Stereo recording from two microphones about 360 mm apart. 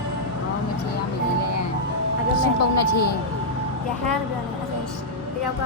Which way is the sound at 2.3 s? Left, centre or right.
Left.